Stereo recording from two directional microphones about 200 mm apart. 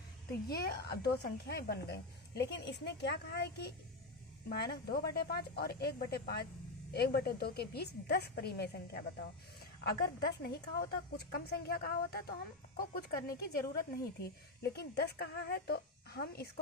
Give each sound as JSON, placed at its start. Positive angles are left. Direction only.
{"t": 0.4, "sound": "a woman's voice", "side_deg": 50}